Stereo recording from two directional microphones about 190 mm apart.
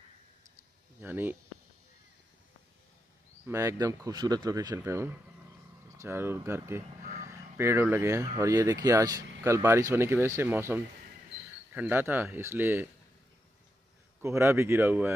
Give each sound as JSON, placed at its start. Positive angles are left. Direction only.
{"t": 1.0, "sound": "speech", "side_deg": -10}
{"t": 3.4, "sound": "speech", "side_deg": -15}
{"t": 14.2, "sound": "speech", "side_deg": -15}